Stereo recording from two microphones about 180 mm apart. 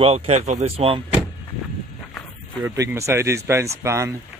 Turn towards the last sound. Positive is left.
turn(degrees=-15)  # may be behind; listen again after turning